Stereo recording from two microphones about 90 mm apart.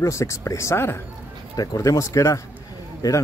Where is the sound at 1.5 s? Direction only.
45° left (ahead or behind).